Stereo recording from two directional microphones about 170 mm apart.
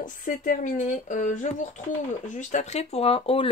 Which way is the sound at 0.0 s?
50° left (ahead or behind).